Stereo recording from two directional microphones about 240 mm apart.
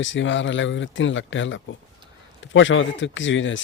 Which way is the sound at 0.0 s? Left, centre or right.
Left.